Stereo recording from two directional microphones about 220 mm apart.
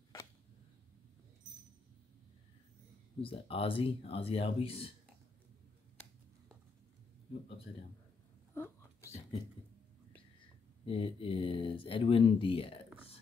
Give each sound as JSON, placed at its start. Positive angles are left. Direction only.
{"t": 3.2, "sound": "speech", "side_deg": 25}
{"t": 8.5, "sound": "a sound", "side_deg": 10}
{"t": 10.9, "sound": "speech", "side_deg": 25}